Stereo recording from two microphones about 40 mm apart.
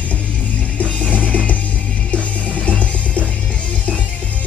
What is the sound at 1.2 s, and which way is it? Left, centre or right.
Music, left.